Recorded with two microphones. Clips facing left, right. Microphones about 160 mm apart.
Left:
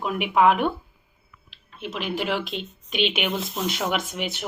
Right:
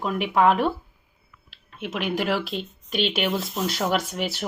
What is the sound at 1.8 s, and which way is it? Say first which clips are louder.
Speech: right 2 dB; 50° right (ahead or behind).